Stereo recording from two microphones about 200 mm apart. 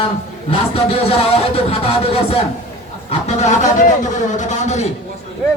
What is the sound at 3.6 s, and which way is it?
A man's voice, 40° left (ahead or behind).